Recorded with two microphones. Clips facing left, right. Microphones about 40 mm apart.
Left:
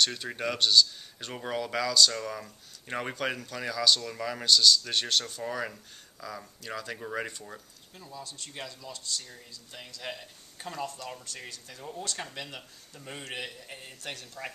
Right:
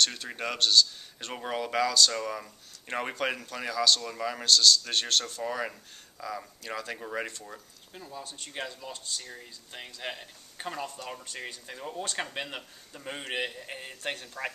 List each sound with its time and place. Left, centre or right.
0.2 s speech: centre
1.3 s speech: centre
8.2 s speech: right
12.4 s a man's voice: right
12.9 s a man's voice: right